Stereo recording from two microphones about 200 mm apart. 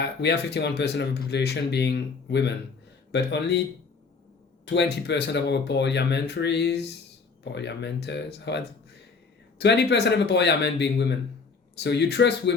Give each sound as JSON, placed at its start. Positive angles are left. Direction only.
{"t": 0.0, "sound": "speech", "side_deg": 60}
{"t": 4.6, "sound": "speech", "side_deg": 60}